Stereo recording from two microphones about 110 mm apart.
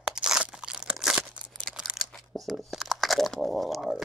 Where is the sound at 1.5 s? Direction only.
5° left (ahead or behind).